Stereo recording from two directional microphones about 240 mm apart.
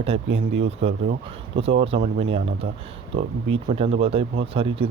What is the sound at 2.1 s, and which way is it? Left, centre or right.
Speech, right.